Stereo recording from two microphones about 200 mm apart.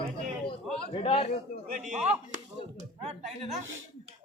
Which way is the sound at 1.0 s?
30° left (ahead or behind).